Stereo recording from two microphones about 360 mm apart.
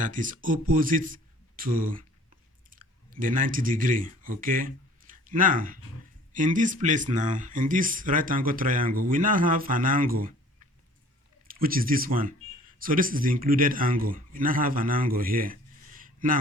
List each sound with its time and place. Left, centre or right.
0.0 s a man's voice: right
11.4 s speech: right